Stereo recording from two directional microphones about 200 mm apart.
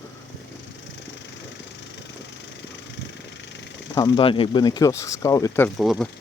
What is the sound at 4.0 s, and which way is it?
Speech, 20° left (ahead or behind).